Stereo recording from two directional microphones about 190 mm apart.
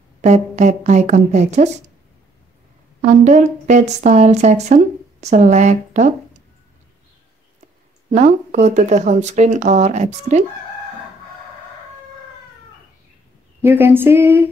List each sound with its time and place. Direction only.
0.2 s speech: 35° right (ahead or behind)
3.0 s speech: 40° right (ahead or behind)
8.1 s speech: 40° right (ahead or behind)
13.6 s a sound: 10° right (ahead or behind)